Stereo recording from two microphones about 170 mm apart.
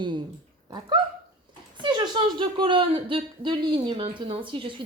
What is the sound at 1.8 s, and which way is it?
Speech, 25° right (ahead or behind).